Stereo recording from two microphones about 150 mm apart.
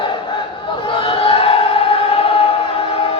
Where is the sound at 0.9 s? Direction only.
40° left (ahead or behind).